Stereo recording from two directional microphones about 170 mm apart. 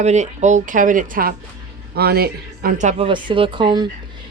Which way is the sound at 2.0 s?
65° right (ahead or behind).